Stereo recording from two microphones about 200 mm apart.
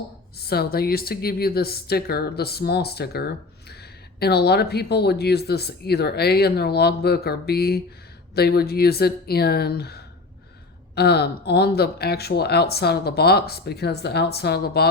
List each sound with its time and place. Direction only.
0.3 s speech: 50° left (ahead or behind)